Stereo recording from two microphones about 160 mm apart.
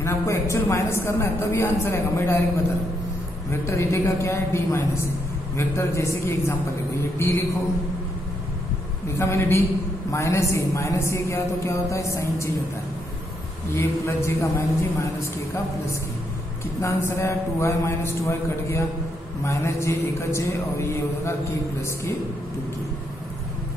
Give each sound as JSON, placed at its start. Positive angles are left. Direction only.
{"t": 0.0, "sound": "a woman's voice", "side_deg": 20}
{"t": 3.6, "sound": "a woman's voice", "side_deg": 15}
{"t": 9.2, "sound": "a woman's voice", "side_deg": 15}
{"t": 13.7, "sound": "a woman's voice", "side_deg": 15}
{"t": 16.8, "sound": "a woman's voice", "side_deg": 15}